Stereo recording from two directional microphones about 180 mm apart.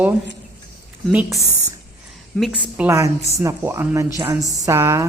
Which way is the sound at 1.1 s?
10° right (ahead or behind).